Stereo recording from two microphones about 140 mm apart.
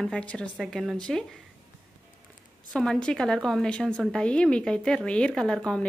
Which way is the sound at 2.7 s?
5° left (ahead or behind).